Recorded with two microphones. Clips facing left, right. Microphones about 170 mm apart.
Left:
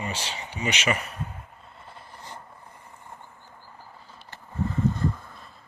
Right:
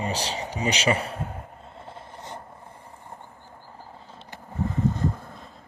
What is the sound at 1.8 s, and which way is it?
Filing, 25° right (ahead or behind).